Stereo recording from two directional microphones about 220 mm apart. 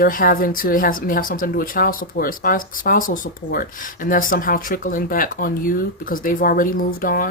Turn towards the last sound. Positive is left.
turn(degrees=40)  # may be behind; listen again after turning